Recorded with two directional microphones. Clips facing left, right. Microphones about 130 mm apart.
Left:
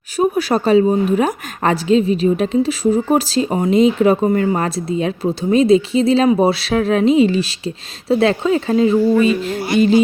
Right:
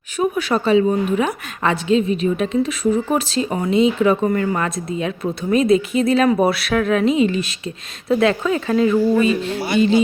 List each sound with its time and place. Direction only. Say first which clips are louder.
0.2 s a woman's voice: left 3 dB; 35° left (ahead or behind)
9.2 s a woman's voice: left 2 dB; 40° left (ahead or behind)